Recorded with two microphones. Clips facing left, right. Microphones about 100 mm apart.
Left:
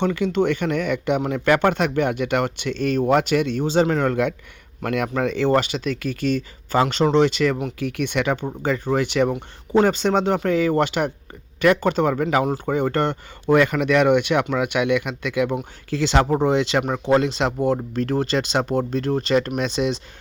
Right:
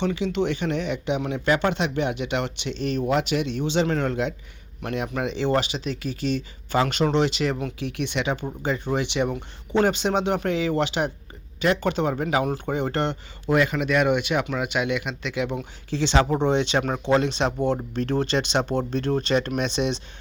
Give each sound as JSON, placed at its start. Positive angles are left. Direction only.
{"t": 0.0, "sound": "speech", "side_deg": 50}
{"t": 16.3, "sound": "speech", "side_deg": 40}